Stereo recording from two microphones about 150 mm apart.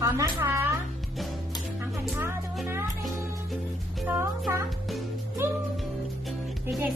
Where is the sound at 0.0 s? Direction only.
20° right (ahead or behind).